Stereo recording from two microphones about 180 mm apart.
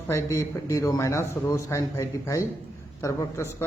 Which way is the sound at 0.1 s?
15° left (ahead or behind).